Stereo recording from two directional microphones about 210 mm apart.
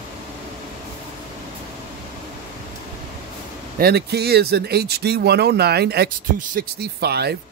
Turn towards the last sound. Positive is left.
turn(degrees=-50)  # may be behind; listen again after turning